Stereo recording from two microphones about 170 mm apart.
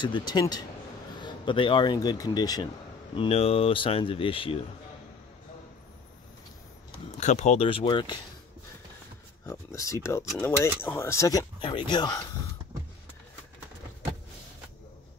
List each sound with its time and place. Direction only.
0.0 s speech: 25° left (ahead or behind)
3.2 s speech: 35° left (ahead or behind)
7.1 s speech: 40° left (ahead or behind)
9.5 s speech: 20° left (ahead or behind)